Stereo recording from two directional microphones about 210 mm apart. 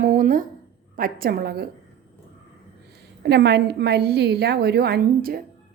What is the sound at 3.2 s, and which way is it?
A woman's voice, 50° right (ahead or behind).